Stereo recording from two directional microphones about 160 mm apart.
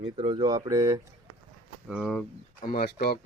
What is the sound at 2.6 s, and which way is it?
Speech, 65° left (ahead or behind).